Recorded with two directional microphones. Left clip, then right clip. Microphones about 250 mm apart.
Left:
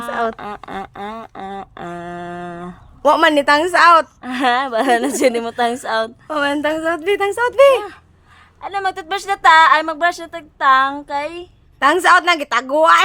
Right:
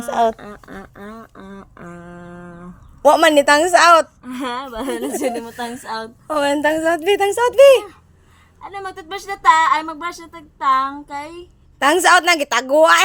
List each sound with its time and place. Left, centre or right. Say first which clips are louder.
0.1 s a woman's voice: right 4 dB; centre
0.3 s duck: left 8 dB; left
3.0 s a woman's voice: right 1 dB; centre
4.2 s a woman's voice: left 9 dB; left
6.2 s a woman's voice: right 6 dB; centre
8.6 s a woman's voice: left 8 dB; left
11.8 s a woman's voice: left 1 dB; centre